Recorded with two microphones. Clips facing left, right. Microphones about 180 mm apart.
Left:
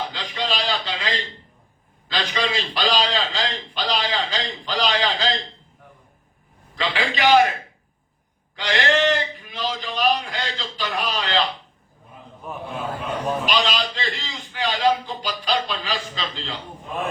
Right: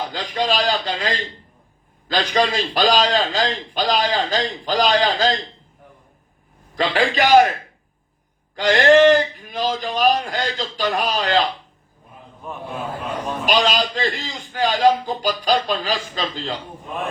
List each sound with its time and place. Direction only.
0.1 s a sound: 40° right (ahead or behind)
2.0 s a man's voice: 45° right (ahead or behind)
6.7 s a man's voice: 45° right (ahead or behind)
8.5 s a man's voice: 45° right (ahead or behind)
13.4 s a man's voice: 45° right (ahead or behind)